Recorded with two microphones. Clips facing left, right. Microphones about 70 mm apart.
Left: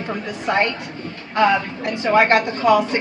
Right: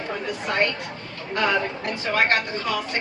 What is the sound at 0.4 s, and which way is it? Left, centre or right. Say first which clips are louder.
Speech: left 5 dB; left.